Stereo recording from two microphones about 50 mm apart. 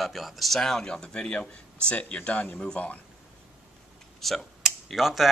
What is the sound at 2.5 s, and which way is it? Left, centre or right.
Speech, centre.